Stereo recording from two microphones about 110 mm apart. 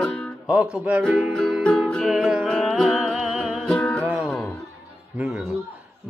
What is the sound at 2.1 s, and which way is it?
Music, 5° right (ahead or behind).